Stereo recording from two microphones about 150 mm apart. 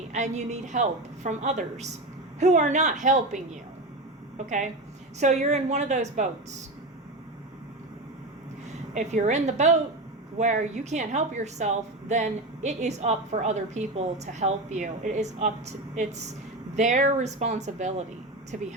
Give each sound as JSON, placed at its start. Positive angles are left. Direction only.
{"t": 0.1, "sound": "a woman's voice", "side_deg": -50}
{"t": 9.0, "sound": "a woman's voice", "side_deg": -55}